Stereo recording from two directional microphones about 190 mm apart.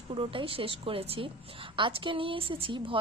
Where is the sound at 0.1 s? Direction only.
30° right (ahead or behind).